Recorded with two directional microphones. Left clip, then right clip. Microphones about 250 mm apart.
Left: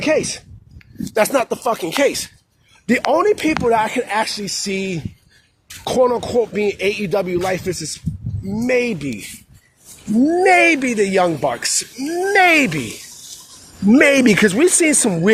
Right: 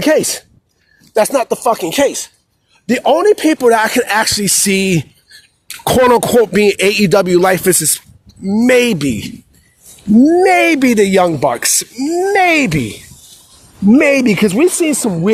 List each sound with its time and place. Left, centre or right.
0.0 s speech: right
1.1 s speech: centre
3.1 s speech: right
10.4 s speech: right
12.3 s speech: right
13.9 s speech: right